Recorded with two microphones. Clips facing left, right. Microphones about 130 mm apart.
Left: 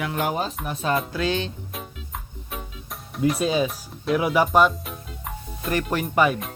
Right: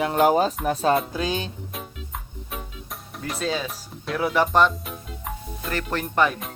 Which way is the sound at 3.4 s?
15° left (ahead or behind).